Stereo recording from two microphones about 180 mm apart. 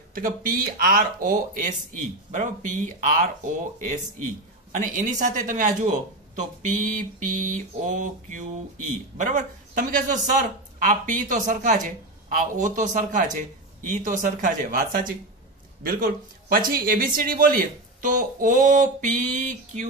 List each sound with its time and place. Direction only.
0.1 s speech: 50° right (ahead or behind)